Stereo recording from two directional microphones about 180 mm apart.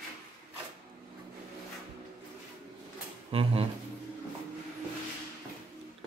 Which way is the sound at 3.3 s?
30° right (ahead or behind).